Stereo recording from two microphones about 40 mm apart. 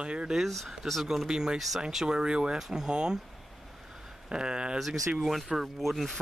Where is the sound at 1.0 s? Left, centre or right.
Centre.